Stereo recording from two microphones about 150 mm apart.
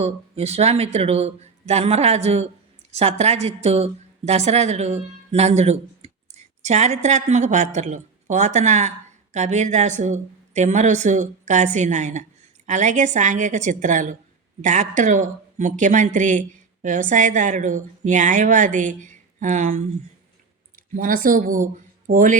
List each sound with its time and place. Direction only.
0.0 s a woman's voice: 45° right (ahead or behind)